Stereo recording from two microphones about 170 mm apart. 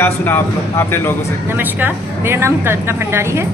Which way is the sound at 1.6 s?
10° right (ahead or behind).